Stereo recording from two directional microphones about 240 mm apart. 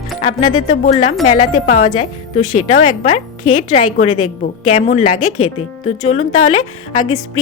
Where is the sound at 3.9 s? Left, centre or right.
Left.